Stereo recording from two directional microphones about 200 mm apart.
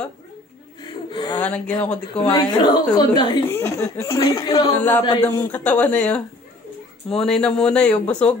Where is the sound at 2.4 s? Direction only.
20° left (ahead or behind).